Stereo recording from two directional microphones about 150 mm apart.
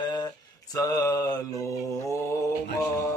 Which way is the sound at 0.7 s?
25° left (ahead or behind).